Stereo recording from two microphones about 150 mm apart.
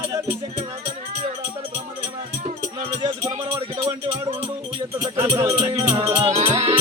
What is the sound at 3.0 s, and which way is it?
Speech, 40° right (ahead or behind).